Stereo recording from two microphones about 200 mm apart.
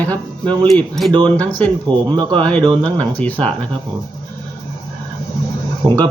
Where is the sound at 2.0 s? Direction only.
20° right (ahead or behind).